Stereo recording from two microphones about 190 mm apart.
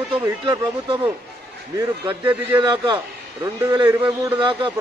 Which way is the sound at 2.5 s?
20° right (ahead or behind).